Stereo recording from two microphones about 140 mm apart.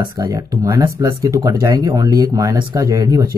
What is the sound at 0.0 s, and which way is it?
Speech, 30° right (ahead or behind).